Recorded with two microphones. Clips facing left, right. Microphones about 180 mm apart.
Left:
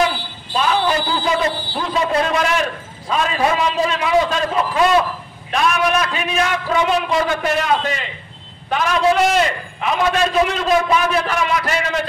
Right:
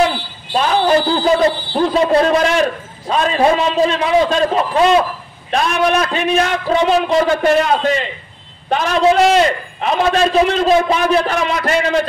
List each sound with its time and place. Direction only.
0.6 s a man's voice: 40° right (ahead or behind)